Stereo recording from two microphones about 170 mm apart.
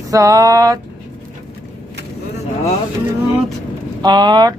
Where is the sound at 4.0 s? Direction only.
25° right (ahead or behind).